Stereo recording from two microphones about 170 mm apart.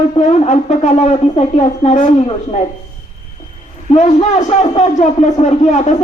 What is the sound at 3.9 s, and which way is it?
A man's voice, 40° left (ahead or behind).